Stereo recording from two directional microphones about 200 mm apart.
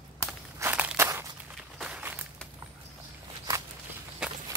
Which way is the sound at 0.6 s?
10° right (ahead or behind).